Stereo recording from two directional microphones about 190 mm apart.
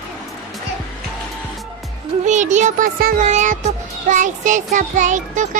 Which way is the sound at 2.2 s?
40° right (ahead or behind).